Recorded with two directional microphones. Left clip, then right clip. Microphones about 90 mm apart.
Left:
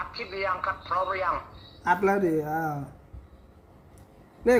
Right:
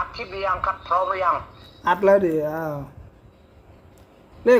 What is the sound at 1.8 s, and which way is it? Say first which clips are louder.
Speech: right 6 dB; centre (ahead or behind).